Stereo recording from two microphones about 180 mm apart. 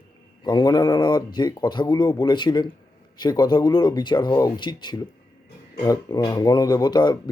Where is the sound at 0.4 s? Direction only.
25° left (ahead or behind).